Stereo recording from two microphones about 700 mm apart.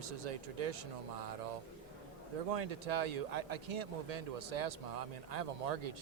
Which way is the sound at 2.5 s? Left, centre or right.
Right.